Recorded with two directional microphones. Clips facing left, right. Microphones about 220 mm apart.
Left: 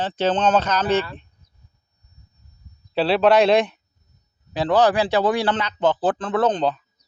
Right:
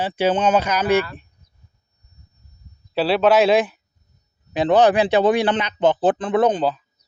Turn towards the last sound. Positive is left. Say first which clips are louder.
# right 1 dB
turn(degrees=-5)  # may be behind; listen again after turning